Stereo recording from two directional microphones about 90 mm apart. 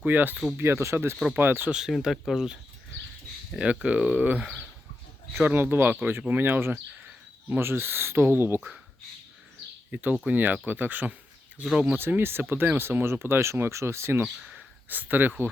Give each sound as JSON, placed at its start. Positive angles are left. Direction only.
{"t": 0.0, "sound": "speech", "side_deg": -20}
{"t": 1.7, "sound": "speech", "side_deg": -5}
{"t": 3.6, "sound": "speech", "side_deg": -15}
{"t": 9.9, "sound": "speech", "side_deg": -20}
{"t": 11.6, "sound": "speech", "side_deg": -10}
{"t": 11.9, "sound": "speech", "side_deg": -25}